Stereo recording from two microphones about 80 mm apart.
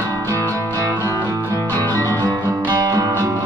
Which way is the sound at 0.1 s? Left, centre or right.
Left.